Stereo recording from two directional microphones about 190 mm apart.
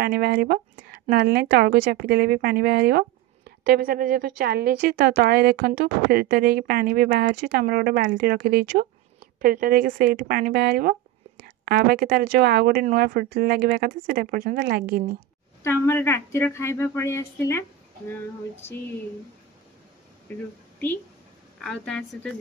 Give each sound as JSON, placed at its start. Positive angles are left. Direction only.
{"t": 0.0, "sound": "speech", "side_deg": -55}
{"t": 15.6, "sound": "speech", "side_deg": 15}
{"t": 20.3, "sound": "a woman's voice", "side_deg": 10}